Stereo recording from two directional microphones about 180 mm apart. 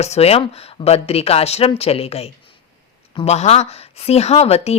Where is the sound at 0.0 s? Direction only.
35° left (ahead or behind).